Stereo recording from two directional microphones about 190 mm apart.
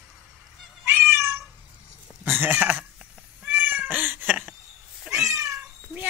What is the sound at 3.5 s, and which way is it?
Cat, 10° right (ahead or behind).